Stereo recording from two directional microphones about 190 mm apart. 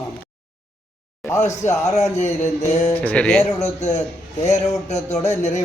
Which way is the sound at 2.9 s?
10° left (ahead or behind).